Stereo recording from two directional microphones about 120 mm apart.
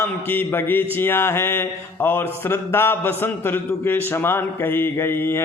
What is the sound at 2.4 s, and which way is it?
Speech, 20° left (ahead or behind).